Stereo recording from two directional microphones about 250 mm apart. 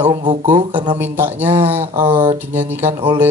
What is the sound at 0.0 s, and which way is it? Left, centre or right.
Speech, centre.